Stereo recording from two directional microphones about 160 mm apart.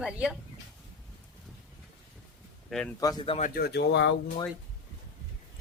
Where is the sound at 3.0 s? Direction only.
25° left (ahead or behind).